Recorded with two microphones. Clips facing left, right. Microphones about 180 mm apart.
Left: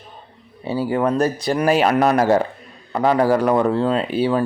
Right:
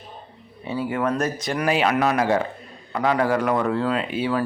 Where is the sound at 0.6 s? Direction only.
35° left (ahead or behind).